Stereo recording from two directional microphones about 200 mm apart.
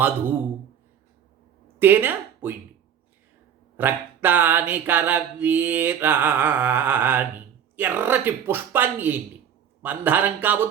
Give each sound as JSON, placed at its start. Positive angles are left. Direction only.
{"t": 1.6, "sound": "speech", "side_deg": -10}
{"t": 3.8, "sound": "mantra", "side_deg": -10}